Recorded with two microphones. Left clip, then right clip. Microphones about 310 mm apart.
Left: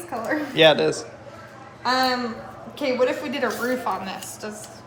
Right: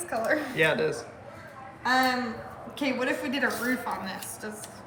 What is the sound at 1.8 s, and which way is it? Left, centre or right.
A woman's voice, centre.